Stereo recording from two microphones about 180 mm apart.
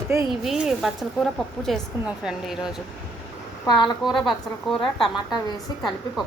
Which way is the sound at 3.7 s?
25° left (ahead or behind).